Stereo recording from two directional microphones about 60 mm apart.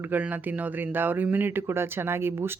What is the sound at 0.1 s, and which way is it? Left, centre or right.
Speech, right.